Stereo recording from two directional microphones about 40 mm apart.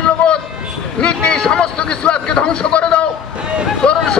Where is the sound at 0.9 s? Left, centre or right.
Left.